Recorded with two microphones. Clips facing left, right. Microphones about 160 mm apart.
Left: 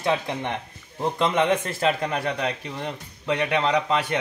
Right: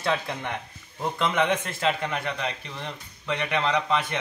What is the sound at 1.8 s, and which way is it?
A man's voice, 35° left (ahead or behind).